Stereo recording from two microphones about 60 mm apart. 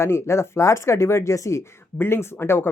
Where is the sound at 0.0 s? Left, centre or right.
Left.